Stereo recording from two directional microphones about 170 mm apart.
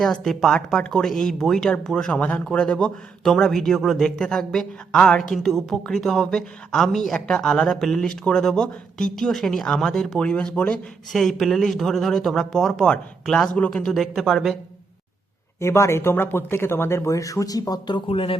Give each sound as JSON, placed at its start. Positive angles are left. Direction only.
{"t": 0.0, "sound": "speech", "side_deg": 5}
{"t": 15.6, "sound": "speech", "side_deg": 15}